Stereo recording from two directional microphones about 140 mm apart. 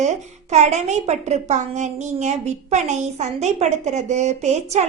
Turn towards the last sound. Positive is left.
turn(degrees=-55)  # may be behind; listen again after turning